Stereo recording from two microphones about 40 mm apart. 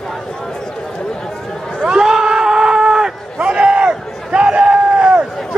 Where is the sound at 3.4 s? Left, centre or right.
Right.